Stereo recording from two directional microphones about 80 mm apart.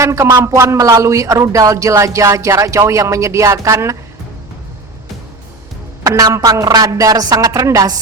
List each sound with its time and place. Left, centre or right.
0.0 s speech: right
6.0 s a woman's voice: right